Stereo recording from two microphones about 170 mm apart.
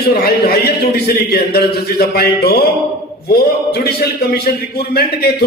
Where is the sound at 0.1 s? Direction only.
65° left (ahead or behind).